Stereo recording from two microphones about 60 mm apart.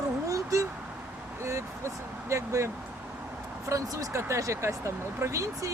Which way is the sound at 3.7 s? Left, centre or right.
Right.